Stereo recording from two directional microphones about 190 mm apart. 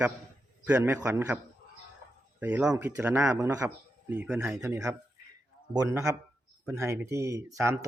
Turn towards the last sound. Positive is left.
turn(degrees=-15)  # may be behind; listen again after turning